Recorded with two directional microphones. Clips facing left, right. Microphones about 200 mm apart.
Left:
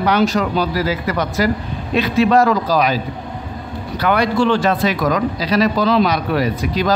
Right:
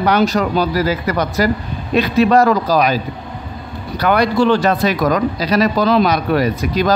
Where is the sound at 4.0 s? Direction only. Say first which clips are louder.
Right 2 dB; 40° right (ahead or behind).